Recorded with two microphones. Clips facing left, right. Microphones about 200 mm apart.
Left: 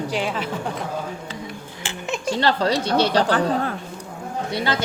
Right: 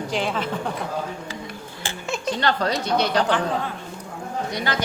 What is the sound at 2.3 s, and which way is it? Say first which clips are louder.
Speech: left 3 dB; 30° left (ahead or behind).